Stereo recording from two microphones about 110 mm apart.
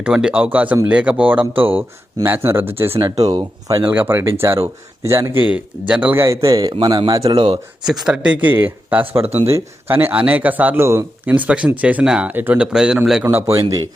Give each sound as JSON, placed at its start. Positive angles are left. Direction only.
{"t": 0.0, "sound": "speech", "side_deg": -10}
{"t": 3.2, "sound": "speech", "side_deg": -35}
{"t": 3.8, "sound": "speech", "side_deg": -20}
{"t": 6.2, "sound": "speech", "side_deg": -30}
{"t": 7.3, "sound": "speech", "side_deg": -55}
{"t": 7.9, "sound": "speech", "side_deg": -5}
{"t": 9.2, "sound": "speech", "side_deg": -65}
{"t": 9.5, "sound": "speech", "side_deg": -25}
{"t": 13.3, "sound": "speech", "side_deg": -35}